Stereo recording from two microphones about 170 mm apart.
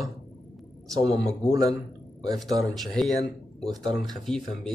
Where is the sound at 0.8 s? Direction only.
20° right (ahead or behind).